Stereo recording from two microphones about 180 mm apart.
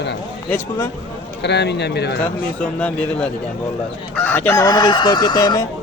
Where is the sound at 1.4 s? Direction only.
70° left (ahead or behind).